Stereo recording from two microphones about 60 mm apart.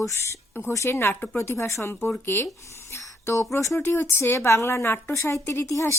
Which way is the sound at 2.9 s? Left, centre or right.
Left.